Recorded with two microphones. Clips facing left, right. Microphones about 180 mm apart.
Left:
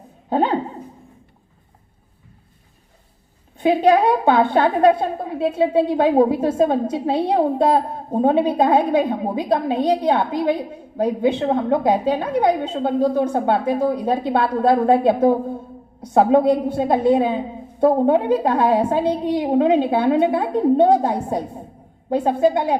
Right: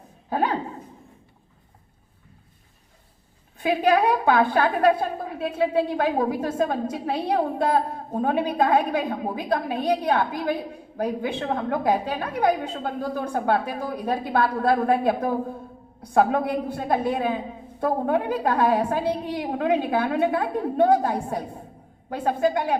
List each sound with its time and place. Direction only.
0.3 s speech: 25° left (ahead or behind)
3.6 s a woman's voice: 25° left (ahead or behind)